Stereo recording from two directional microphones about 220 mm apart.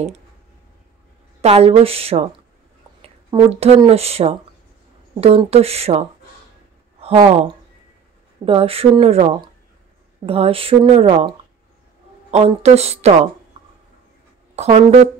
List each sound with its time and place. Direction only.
1.4 s speech: 25° right (ahead or behind)
8.5 s speech: 25° right (ahead or behind)
14.5 s speech: 30° right (ahead or behind)